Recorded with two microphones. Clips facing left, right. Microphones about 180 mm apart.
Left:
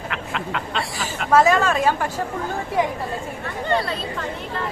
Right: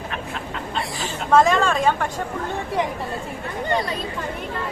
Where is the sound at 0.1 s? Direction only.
90° left.